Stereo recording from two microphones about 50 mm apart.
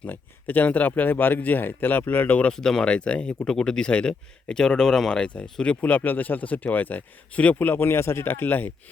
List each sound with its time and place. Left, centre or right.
0.0 s speech: left
2.5 s speech: centre
5.9 s speech: left
7.7 s a man's voice: left